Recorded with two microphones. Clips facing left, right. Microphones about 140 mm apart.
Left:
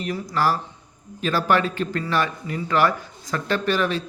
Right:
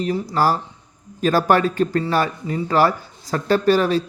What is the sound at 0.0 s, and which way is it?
Speech, 30° right (ahead or behind).